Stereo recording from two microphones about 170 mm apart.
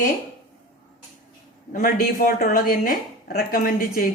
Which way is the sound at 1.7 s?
55° left (ahead or behind).